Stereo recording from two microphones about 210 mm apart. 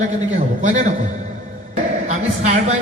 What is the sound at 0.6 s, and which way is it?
Speech, 35° right (ahead or behind).